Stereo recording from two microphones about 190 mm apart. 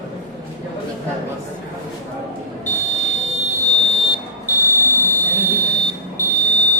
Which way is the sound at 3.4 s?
35° left (ahead or behind).